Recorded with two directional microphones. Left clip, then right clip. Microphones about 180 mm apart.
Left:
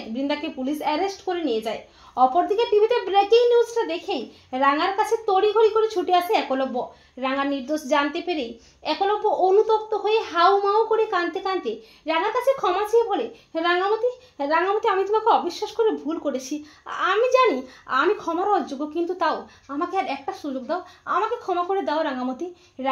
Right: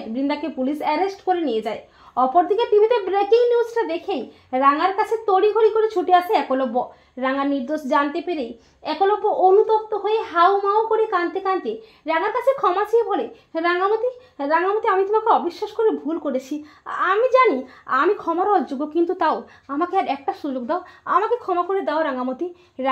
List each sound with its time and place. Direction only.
0.1 s a woman's voice: 30° right (ahead or behind)